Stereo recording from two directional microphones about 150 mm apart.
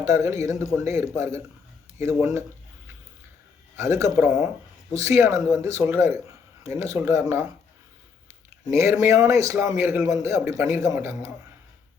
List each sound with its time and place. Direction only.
0.0 s a man's voice: 20° right (ahead or behind)
3.8 s a man's voice: 20° right (ahead or behind)
8.7 s a man's voice: 20° right (ahead or behind)